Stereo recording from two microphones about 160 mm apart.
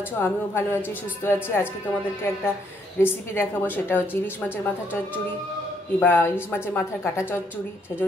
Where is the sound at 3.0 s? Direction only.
15° left (ahead or behind).